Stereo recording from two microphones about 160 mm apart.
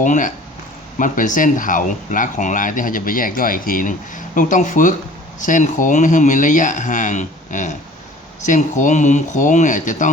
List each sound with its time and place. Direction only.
0.0 s speech: 55° left (ahead or behind)